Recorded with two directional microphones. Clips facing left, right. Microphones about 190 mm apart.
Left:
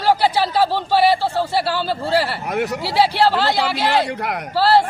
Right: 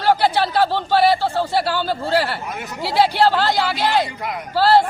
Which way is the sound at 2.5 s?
70° left (ahead or behind).